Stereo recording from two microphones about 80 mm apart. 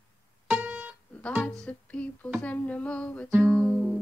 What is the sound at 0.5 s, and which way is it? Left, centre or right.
Music, right.